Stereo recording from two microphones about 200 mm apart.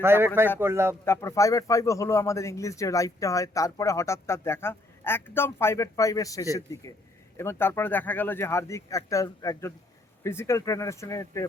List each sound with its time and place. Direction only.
0.0 s speech: 10° right (ahead or behind)
1.0 s a man's voice: 15° left (ahead or behind)